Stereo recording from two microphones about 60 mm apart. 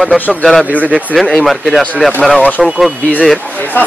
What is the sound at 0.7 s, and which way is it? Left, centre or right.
Speech, left.